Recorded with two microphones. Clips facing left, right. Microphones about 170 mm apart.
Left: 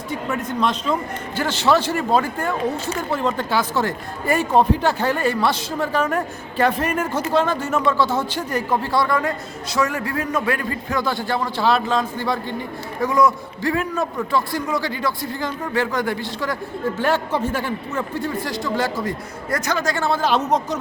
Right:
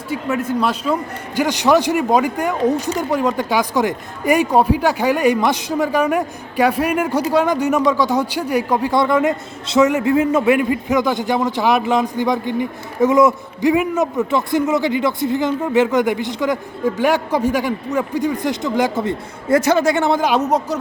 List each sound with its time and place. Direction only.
0.1 s a man's voice: 5° right (ahead or behind)